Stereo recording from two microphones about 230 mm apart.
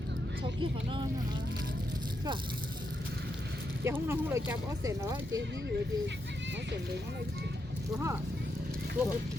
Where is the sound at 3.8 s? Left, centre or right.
Centre.